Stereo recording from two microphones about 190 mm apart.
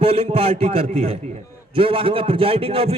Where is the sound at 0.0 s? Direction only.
30° right (ahead or behind).